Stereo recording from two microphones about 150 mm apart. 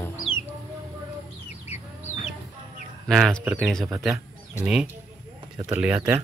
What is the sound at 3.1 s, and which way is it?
Speech, centre (ahead or behind).